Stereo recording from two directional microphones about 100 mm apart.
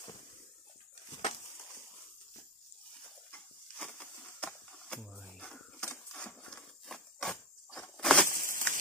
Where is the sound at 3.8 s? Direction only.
10° left (ahead or behind).